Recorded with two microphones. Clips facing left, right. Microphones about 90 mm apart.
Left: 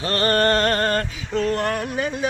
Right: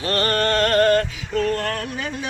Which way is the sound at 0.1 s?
35° left (ahead or behind).